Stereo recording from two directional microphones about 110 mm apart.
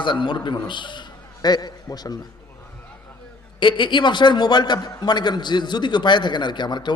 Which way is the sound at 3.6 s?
45° left (ahead or behind).